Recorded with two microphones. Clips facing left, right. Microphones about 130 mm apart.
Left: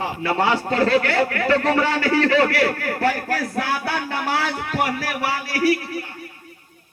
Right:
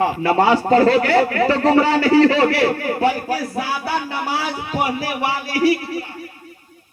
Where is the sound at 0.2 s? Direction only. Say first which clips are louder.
Right 2 dB; 35° right (ahead or behind).